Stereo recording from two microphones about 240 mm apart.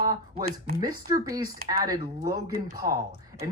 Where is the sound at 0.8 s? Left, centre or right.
Centre.